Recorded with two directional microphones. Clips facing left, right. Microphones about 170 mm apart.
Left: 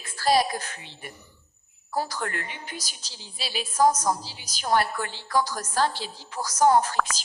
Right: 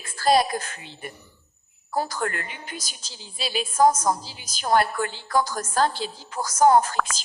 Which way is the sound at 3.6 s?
50° right (ahead or behind).